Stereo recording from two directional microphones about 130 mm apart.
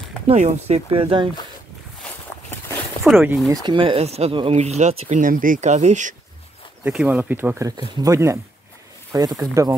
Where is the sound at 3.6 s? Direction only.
40° right (ahead or behind); by 6.1 s 65° right (ahead or behind).